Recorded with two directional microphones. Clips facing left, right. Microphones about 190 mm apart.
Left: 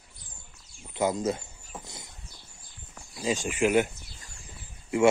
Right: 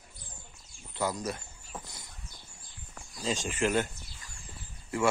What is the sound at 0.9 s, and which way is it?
Speech, 20° left (ahead or behind).